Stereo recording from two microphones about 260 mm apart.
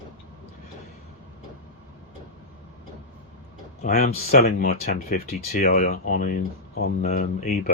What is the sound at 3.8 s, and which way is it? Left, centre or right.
Speech, left.